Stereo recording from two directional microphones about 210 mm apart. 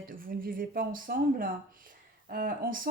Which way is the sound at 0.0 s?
40° right (ahead or behind).